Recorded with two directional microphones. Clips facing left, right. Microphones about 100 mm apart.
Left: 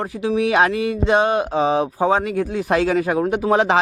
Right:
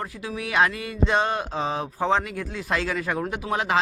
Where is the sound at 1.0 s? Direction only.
15° left (ahead or behind).